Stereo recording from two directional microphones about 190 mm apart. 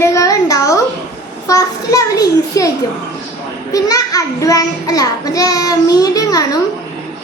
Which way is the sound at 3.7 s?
20° left (ahead or behind).